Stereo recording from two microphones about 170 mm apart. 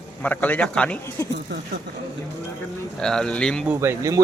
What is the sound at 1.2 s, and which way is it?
Speech, 20° left (ahead or behind).